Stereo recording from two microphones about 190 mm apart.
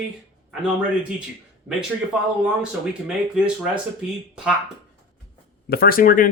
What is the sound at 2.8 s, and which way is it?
Speech, 5° right (ahead or behind).